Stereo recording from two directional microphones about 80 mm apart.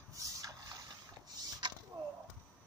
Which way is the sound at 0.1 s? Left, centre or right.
Right.